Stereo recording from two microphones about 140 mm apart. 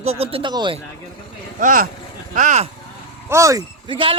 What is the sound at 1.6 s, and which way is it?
Speech, 70° right (ahead or behind).